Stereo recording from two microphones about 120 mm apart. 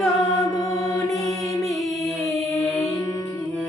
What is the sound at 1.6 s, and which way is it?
Music, centre (ahead or behind).